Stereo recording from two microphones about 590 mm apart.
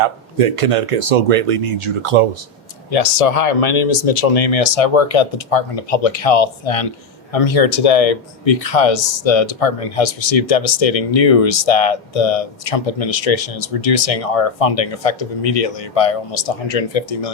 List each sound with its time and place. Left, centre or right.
0.0 s speech: right
2.9 s speech: left